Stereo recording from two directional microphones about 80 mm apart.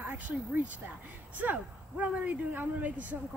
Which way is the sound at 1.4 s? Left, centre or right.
Centre.